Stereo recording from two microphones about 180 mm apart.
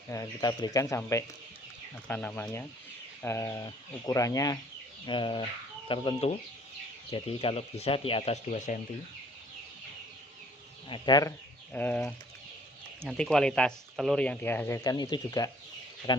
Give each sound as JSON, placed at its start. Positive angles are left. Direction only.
{"t": 0.1, "sound": "speech", "side_deg": 20}
{"t": 10.8, "sound": "speech", "side_deg": 25}
{"t": 14.8, "sound": "speech", "side_deg": 20}